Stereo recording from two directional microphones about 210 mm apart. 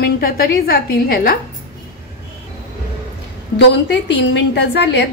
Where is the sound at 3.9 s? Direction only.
55° left (ahead or behind).